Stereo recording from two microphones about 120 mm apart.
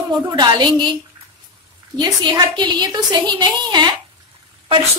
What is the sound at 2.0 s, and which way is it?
A woman's voice, 40° right (ahead or behind).